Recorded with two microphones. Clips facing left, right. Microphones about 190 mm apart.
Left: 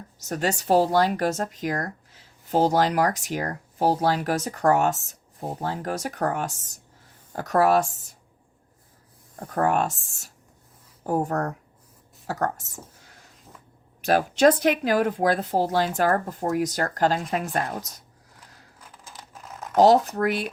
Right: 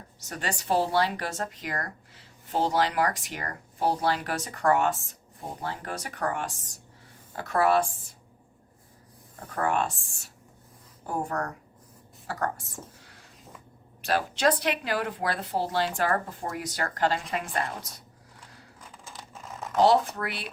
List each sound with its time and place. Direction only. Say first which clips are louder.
0.2 s speech: left 8 dB; 40° left (ahead or behind)
9.4 s speech: left 4 dB; 45° left (ahead or behind)
18.8 s a sound: even; centre (ahead or behind)
19.7 s speech: left 5 dB; 45° left (ahead or behind)